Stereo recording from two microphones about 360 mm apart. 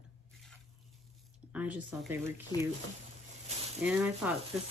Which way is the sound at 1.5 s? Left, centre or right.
Centre.